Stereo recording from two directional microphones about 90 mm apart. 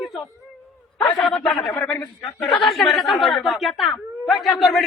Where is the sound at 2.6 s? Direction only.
5° left (ahead or behind).